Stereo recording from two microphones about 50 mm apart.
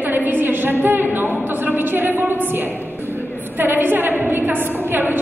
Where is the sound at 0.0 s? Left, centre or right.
Right.